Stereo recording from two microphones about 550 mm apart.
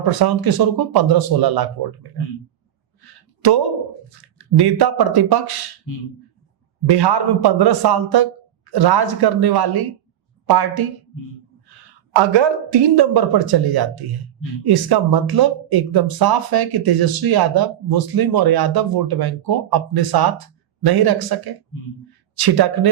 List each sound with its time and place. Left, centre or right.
0.0 s speech: right
3.0 s a sound: right
4.5 s speech: right
6.8 s a woman's voice: right
12.1 s speech: right